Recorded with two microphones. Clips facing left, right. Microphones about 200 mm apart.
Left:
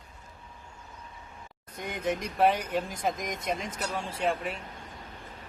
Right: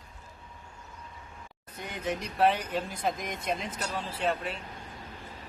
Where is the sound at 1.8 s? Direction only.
10° left (ahead or behind).